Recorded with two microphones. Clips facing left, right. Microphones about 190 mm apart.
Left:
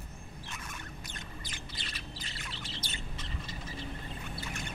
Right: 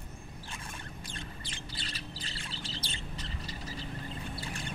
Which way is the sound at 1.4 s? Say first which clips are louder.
Right 1 dB; 30° right (ahead or behind).